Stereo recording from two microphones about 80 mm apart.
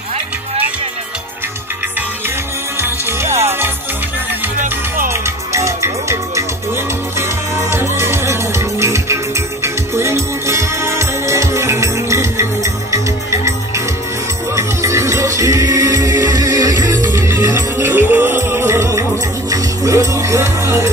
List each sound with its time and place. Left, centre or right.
2.8 s music: right
5.1 s music: right
17.1 s music: right